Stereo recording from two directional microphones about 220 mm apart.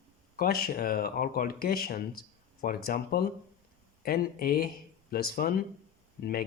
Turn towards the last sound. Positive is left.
turn(degrees=45)  # may be behind; listen again after turning